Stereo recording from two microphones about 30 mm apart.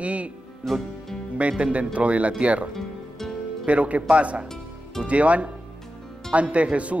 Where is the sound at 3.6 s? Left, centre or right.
Right.